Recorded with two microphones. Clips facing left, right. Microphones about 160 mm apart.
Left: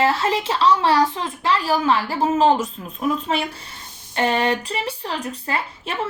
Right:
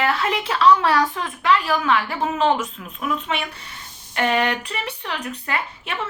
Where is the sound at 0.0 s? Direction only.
30° left (ahead or behind).